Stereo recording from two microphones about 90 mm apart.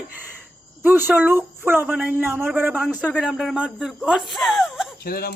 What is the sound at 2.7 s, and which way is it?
Speech, 10° right (ahead or behind).